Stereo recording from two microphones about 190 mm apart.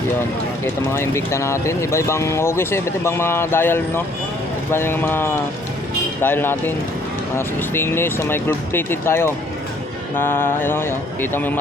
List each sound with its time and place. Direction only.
0.6 s speech: 15° left (ahead or behind)